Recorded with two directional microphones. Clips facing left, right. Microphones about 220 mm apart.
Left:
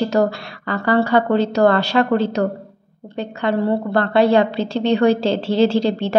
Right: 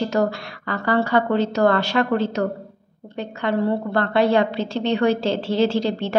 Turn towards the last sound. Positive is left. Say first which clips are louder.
# left 4 dB
turn(degrees=30)  # may be behind; listen again after turning